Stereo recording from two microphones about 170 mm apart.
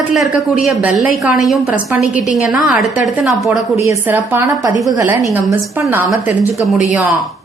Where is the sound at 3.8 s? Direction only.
10° right (ahead or behind).